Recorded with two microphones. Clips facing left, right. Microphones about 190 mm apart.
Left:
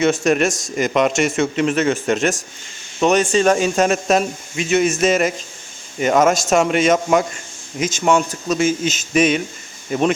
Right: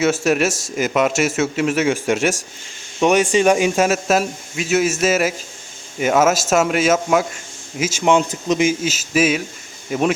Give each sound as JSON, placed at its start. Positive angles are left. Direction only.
{"t": 0.0, "sound": "speech", "side_deg": -5}
{"t": 8.0, "sound": "speech", "side_deg": -20}
{"t": 8.8, "sound": "speech", "side_deg": -5}